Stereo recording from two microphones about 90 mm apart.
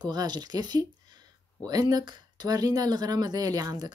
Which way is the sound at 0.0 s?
50° right (ahead or behind).